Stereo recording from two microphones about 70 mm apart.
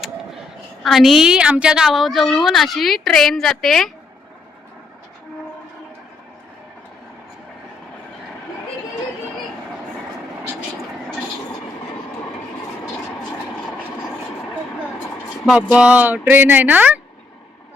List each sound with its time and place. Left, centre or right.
0.8 s a woman's voice: centre
15.5 s speech: centre